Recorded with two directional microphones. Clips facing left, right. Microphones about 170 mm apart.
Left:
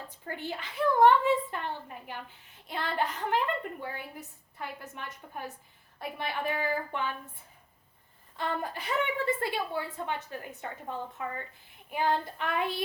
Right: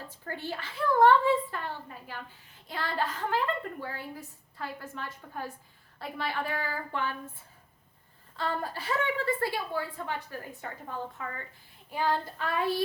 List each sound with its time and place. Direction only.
0.1 s a woman's voice: 15° left (ahead or behind)
8.4 s a woman's voice: 20° left (ahead or behind)
11.2 s a woman's voice: 20° left (ahead or behind)